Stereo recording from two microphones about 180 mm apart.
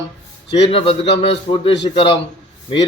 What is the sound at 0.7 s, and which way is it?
A man's voice, 35° left (ahead or behind).